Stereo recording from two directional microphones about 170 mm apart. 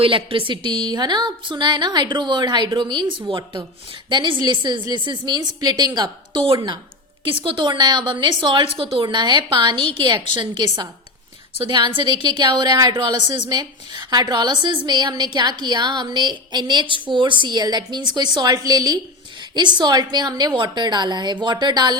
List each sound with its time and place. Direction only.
0.0 s a woman's voice: 30° right (ahead or behind)